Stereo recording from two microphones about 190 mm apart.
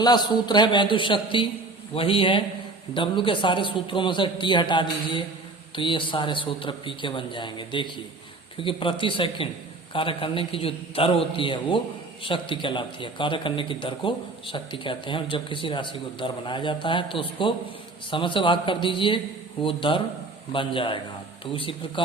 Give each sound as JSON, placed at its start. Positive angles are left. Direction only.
{"t": 0.0, "sound": "a man's voice", "side_deg": 20}